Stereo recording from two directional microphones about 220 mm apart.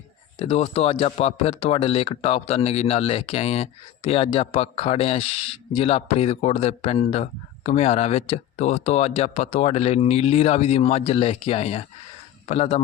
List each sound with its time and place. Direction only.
0.3 s speech: 30° left (ahead or behind)